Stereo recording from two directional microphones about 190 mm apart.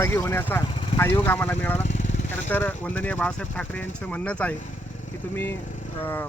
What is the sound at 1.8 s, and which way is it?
Vehicle, 40° left (ahead or behind).